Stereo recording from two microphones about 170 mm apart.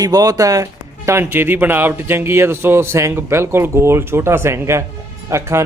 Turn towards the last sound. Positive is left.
turn(degrees=-15)  # may be behind; listen again after turning